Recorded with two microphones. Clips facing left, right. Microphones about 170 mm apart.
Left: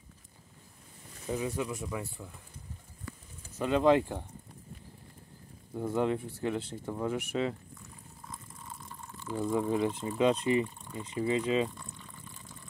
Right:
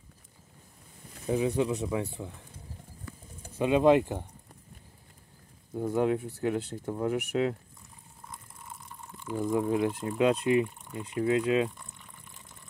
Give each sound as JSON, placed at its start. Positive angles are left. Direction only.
{"t": 1.2, "sound": "speech", "side_deg": -20}
{"t": 3.5, "sound": "speech", "side_deg": -15}
{"t": 5.8, "sound": "speech", "side_deg": -5}
{"t": 9.1, "sound": "a sound", "side_deg": -15}
{"t": 9.5, "sound": "speech", "side_deg": -5}